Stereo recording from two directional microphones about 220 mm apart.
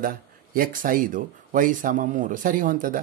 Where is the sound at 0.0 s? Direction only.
40° right (ahead or behind).